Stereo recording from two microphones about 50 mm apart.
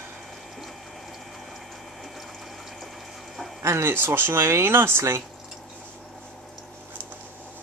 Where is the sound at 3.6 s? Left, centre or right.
Right.